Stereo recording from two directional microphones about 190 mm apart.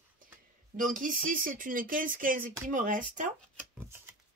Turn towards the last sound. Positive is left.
turn(degrees=-45)  # may be behind; listen again after turning